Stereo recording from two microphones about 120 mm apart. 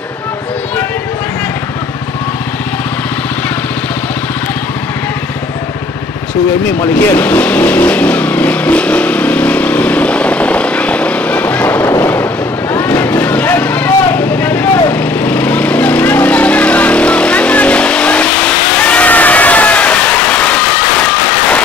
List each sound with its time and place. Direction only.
6.6 s vehicle: 20° left (ahead or behind)
12.0 s a sound: 15° left (ahead or behind)
12.7 s vehicle: 15° left (ahead or behind)